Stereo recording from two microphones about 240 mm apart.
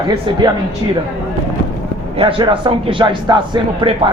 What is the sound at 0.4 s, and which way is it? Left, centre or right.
Speech, centre.